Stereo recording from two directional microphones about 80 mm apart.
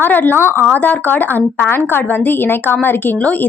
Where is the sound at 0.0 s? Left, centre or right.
Left.